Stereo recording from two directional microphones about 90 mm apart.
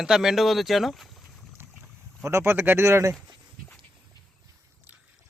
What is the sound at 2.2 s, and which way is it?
Speech, 30° right (ahead or behind).